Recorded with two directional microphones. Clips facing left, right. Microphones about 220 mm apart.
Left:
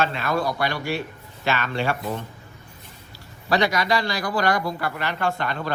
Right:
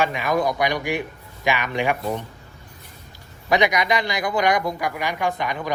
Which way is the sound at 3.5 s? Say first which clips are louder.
Right 2 dB; 20° right (ahead or behind).